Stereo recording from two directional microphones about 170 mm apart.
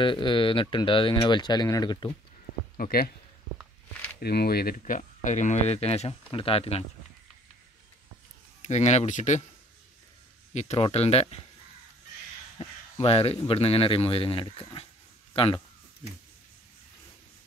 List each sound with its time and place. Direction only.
0.0 s speech: 30° left (ahead or behind)
2.8 s speech: 65° left (ahead or behind)
4.2 s speech: 70° left (ahead or behind); by 6.8 s 35° left (ahead or behind)
8.6 s speech: 40° left (ahead or behind)
10.5 s speech: 40° left (ahead or behind)
12.5 s a sound: 35° left (ahead or behind)
13.5 s speech: 35° left (ahead or behind)